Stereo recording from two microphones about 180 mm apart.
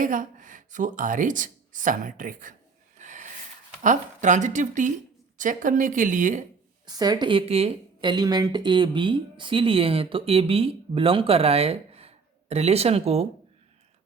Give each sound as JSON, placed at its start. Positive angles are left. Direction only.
{"t": 0.0, "sound": "a woman's voice", "side_deg": -50}
{"t": 3.0, "sound": "snort", "side_deg": -45}
{"t": 3.8, "sound": "speech", "side_deg": -45}
{"t": 6.8, "sound": "speech", "side_deg": -20}